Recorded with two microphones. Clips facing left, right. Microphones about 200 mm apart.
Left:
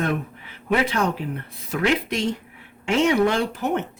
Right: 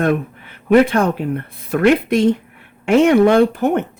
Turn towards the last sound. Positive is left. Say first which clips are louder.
# right 9 dB
turn(degrees=-55)  # may be behind; listen again after turning